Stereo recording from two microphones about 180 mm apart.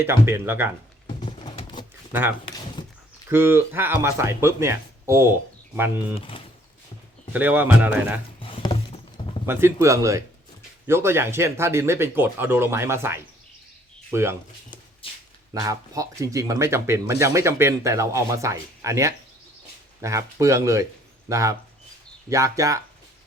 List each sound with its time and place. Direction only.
0.0 s speech: 15° right (ahead or behind)
1.0 s a sound: 30° left (ahead or behind)
3.2 s speech: 10° right (ahead or behind)
6.1 s speech: 30° left (ahead or behind)
7.3 s speech: 10° right (ahead or behind)
8.4 s a sound: 30° left (ahead or behind)
9.5 s speech: 10° right (ahead or behind)
15.0 s a sound: 30° left (ahead or behind)
15.5 s speech: 20° right (ahead or behind)